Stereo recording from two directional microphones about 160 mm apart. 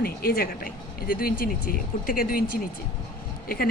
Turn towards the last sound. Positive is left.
turn(degrees=65)  # may be behind; listen again after turning